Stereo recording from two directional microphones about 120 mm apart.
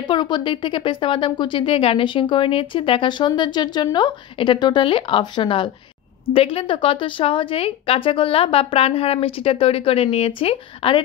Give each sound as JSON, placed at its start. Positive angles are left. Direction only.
{"t": 0.0, "sound": "a woman's voice", "side_deg": 40}